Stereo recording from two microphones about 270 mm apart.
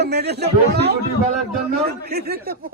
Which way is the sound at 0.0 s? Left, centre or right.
Right.